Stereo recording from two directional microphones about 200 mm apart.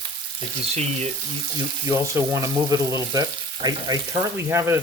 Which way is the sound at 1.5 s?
15° right (ahead or behind).